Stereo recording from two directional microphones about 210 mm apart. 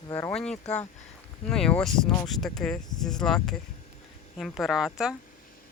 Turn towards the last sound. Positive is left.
turn(degrees=-5)  # may be behind; listen again after turning